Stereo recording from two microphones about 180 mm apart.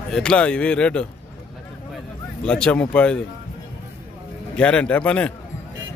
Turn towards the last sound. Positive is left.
turn(degrees=5)  # may be behind; listen again after turning